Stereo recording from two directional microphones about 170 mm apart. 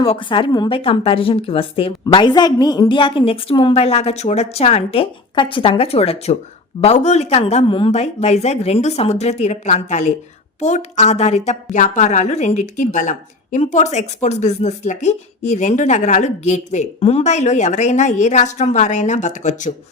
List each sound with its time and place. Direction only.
0.0 s a woman's voice: 30° left (ahead or behind)